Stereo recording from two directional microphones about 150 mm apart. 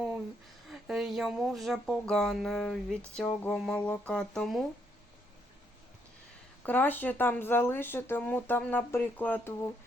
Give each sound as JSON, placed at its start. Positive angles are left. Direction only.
{"t": 0.7, "sound": "speech", "side_deg": 0}
{"t": 6.6, "sound": "speech", "side_deg": 10}